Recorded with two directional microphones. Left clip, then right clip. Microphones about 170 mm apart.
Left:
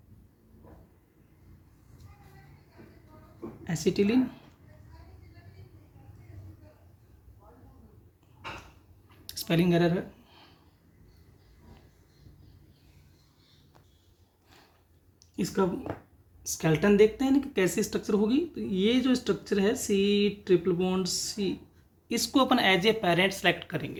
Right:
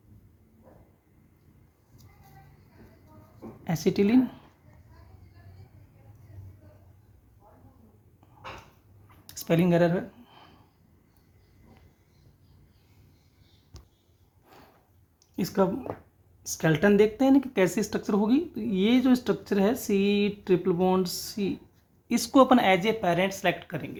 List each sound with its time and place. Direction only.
3.6 s a woman's voice: 55° right (ahead or behind)
9.0 s a sound: 35° right (ahead or behind)
9.6 s speech: 45° right (ahead or behind)
15.6 s speech: 55° right (ahead or behind)
22.1 s speech: 45° right (ahead or behind); by 24.0 s 30° right (ahead or behind)